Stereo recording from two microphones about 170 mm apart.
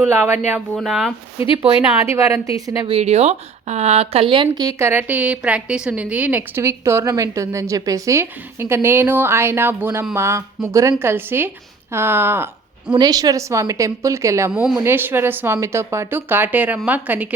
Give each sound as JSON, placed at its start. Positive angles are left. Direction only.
{"t": 0.0, "sound": "speech", "side_deg": -15}
{"t": 1.4, "sound": "speech", "side_deg": 30}
{"t": 2.1, "sound": "a woman's voice", "side_deg": -15}
{"t": 2.8, "sound": "a woman's voice", "side_deg": -40}
{"t": 14.5, "sound": "speech", "side_deg": -5}